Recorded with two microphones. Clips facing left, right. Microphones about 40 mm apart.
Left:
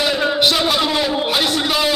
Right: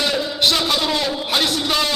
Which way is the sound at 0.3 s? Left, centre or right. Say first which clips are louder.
Even; centre.